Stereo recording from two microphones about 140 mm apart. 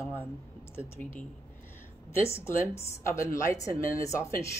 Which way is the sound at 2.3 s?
20° left (ahead or behind).